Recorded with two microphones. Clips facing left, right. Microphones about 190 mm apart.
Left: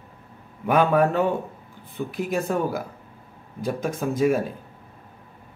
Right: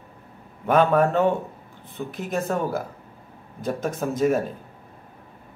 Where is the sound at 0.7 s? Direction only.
5° left (ahead or behind).